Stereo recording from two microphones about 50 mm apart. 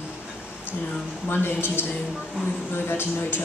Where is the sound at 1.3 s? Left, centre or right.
Left.